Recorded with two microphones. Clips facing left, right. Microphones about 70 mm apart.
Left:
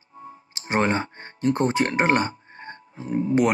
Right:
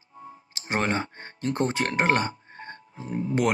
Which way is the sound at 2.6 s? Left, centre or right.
Left.